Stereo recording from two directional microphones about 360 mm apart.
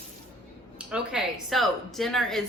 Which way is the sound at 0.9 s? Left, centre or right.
Centre.